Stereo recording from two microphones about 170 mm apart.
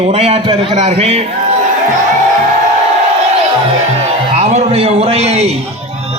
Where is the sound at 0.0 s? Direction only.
35° right (ahead or behind).